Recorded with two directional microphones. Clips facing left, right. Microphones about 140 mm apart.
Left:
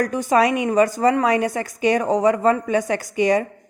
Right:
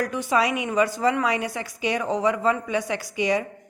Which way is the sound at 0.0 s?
45° left (ahead or behind).